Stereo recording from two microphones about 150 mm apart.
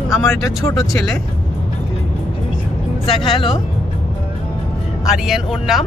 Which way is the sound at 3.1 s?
35° left (ahead or behind).